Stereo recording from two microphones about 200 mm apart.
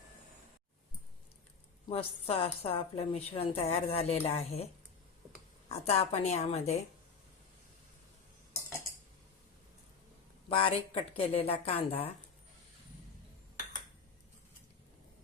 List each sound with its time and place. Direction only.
1.9 s a woman's voice: 30° left (ahead or behind)
10.5 s a woman's voice: 25° left (ahead or behind)